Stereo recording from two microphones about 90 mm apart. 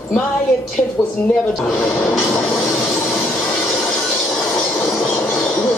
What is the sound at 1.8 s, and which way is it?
Speech, 20° left (ahead or behind).